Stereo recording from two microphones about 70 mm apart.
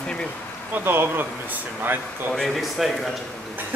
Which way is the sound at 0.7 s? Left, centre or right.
Right.